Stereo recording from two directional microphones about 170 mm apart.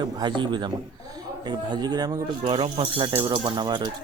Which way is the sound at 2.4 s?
30° right (ahead or behind).